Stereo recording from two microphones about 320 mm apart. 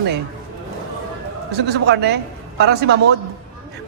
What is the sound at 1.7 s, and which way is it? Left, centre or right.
A man's voice, right.